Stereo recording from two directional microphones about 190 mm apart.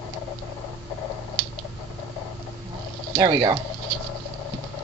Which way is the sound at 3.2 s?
25° right (ahead or behind).